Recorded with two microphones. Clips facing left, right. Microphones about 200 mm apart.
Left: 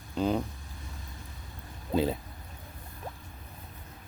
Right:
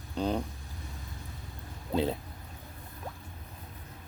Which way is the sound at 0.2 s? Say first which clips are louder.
Left 2 dB; 5° left (ahead or behind).